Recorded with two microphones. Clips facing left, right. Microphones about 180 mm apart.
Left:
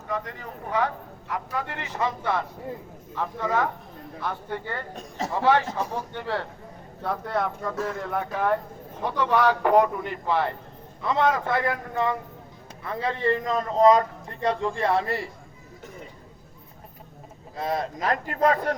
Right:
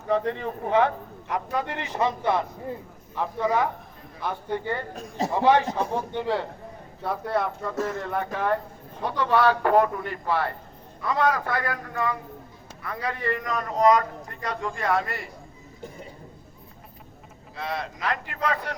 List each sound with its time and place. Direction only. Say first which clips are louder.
0.1 s a man's voice: right 8 dB; 30° right (ahead or behind); by 8.5 s centre (ahead or behind)
9.1 s a man's voice: right 1 dB; 15° left (ahead or behind); by 15.3 s 30° left (ahead or behind)
17.6 s a man's voice: left 3 dB; 40° left (ahead or behind)